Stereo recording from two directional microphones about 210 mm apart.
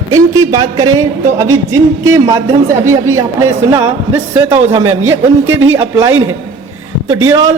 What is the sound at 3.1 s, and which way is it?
A man's voice, 15° right (ahead or behind).